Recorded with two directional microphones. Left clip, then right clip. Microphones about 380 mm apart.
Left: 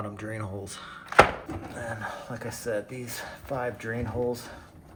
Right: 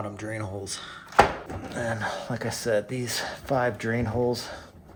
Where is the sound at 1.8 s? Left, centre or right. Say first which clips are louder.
Right 7 dB; right.